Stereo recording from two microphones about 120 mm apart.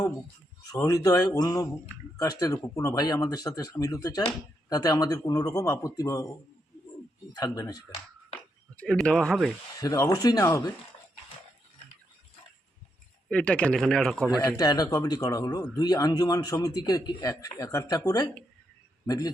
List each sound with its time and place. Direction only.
0.6 s a man's voice: 30° left (ahead or behind)
7.3 s a man's voice: 30° left (ahead or behind)
8.7 s speech: 10° left (ahead or behind)
9.8 s speech: 30° left (ahead or behind)
13.2 s a man's voice: 10° left (ahead or behind)
14.3 s a man's voice: 30° left (ahead or behind)